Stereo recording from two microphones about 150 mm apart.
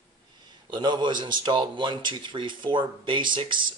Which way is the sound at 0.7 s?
30° right (ahead or behind).